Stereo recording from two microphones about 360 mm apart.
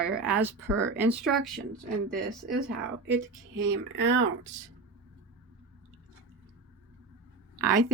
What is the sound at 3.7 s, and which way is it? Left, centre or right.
Speech, right.